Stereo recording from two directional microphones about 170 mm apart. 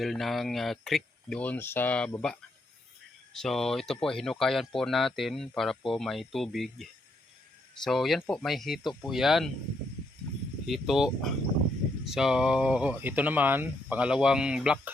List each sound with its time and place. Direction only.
0.0 s speech: centre (ahead or behind)
3.3 s speech: centre (ahead or behind)
7.9 s speech: centre (ahead or behind)
10.7 s speech: centre (ahead or behind)